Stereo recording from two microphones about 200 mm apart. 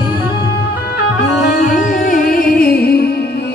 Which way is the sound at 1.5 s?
40° left (ahead or behind).